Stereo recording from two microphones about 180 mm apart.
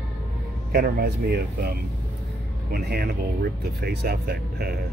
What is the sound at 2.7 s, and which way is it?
Speech, 60° right (ahead or behind).